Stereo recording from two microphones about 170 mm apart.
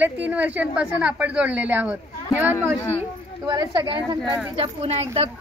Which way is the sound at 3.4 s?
20° right (ahead or behind).